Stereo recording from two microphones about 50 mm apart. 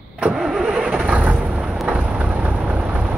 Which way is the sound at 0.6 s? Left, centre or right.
Centre.